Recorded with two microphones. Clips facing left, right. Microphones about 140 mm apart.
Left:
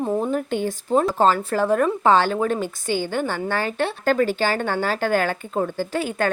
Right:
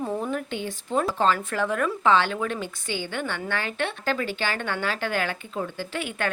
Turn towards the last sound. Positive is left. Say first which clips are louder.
# left 6 dB
turn(degrees=40)  # may be behind; listen again after turning